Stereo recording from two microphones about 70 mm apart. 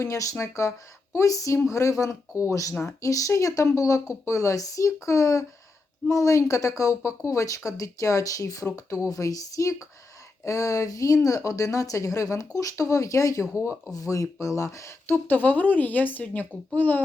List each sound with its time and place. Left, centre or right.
0.0 s speech: left